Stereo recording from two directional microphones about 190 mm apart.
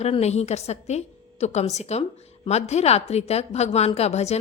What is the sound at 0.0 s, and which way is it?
A woman's voice, 35° left (ahead or behind).